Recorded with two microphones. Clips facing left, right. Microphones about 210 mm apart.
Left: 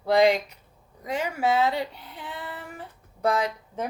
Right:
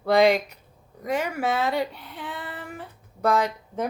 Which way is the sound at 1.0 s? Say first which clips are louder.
Right 1 dB; 60° right (ahead or behind).